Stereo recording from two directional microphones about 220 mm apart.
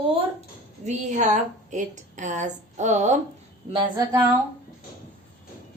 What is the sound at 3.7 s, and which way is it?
Speech, 15° right (ahead or behind).